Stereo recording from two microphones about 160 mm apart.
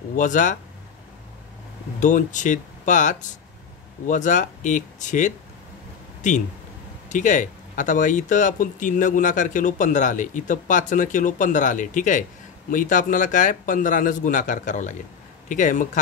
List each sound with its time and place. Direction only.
0.1 s speech: 55° left (ahead or behind)
2.0 s speech: 50° left (ahead or behind)